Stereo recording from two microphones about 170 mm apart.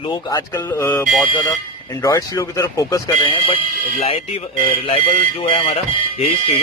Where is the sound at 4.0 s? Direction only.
35° left (ahead or behind).